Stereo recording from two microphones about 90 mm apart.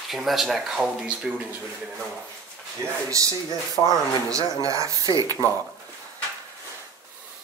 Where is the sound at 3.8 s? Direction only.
30° left (ahead or behind).